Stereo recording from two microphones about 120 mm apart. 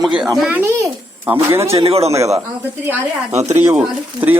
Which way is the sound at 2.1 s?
25° right (ahead or behind).